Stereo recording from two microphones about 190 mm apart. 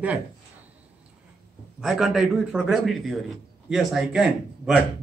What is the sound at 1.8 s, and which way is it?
Speech, centre (ahead or behind).